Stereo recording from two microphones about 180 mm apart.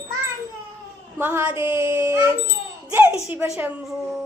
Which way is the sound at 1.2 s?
10° right (ahead or behind).